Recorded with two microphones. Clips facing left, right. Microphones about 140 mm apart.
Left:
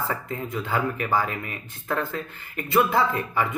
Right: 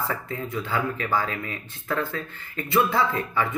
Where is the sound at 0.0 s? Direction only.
20° left (ahead or behind).